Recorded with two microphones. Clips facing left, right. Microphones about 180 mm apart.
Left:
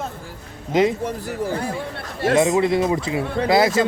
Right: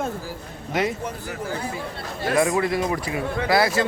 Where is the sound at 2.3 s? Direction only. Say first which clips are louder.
Left 4 dB; 25° left (ahead or behind).